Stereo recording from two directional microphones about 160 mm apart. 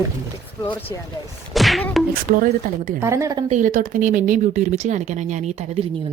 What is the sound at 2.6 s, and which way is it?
Speech, 60° right (ahead or behind).